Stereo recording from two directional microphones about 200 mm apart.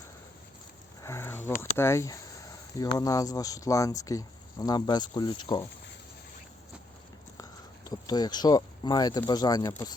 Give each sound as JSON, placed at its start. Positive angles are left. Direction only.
{"t": 1.0, "sound": "a sound", "side_deg": 15}
{"t": 1.7, "sound": "speech", "side_deg": 15}
{"t": 7.9, "sound": "speech", "side_deg": 20}